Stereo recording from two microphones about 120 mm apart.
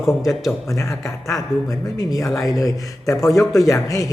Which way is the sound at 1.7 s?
30° left (ahead or behind).